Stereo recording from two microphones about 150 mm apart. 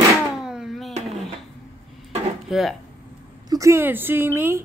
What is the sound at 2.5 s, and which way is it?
Speech, 5° right (ahead or behind).